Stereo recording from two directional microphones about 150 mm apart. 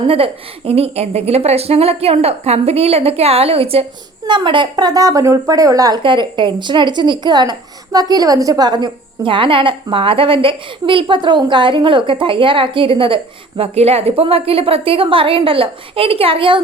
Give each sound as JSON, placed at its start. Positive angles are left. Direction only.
{"t": 0.1, "sound": "a woman's voice", "side_deg": -40}